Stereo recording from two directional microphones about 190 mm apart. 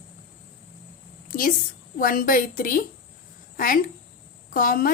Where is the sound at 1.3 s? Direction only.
45° left (ahead or behind).